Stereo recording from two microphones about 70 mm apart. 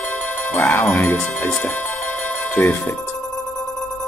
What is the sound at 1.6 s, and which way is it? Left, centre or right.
Music, left.